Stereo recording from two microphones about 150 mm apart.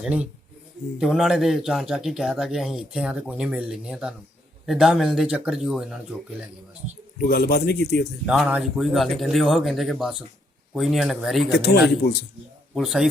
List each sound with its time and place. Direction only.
0.0 s speech: 5° right (ahead or behind)
7.2 s speech: 90° left
8.3 s speech: 5° right (ahead or behind)
12.7 s speech: centre (ahead or behind)